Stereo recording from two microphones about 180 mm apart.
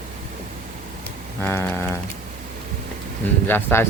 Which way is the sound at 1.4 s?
10° left (ahead or behind).